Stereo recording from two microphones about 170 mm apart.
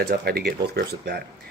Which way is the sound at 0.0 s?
65° right (ahead or behind).